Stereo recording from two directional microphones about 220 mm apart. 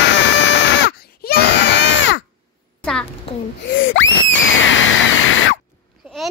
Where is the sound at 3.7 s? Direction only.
60° left (ahead or behind).